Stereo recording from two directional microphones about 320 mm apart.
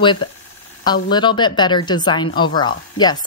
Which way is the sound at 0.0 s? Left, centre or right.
Centre.